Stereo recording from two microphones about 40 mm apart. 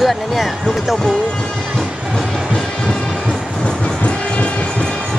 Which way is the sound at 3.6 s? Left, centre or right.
Left.